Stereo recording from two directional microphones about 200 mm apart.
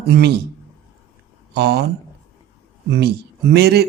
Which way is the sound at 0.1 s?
55° right (ahead or behind).